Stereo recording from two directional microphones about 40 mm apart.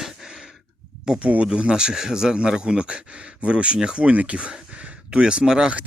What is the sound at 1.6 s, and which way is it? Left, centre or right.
A man's voice, right.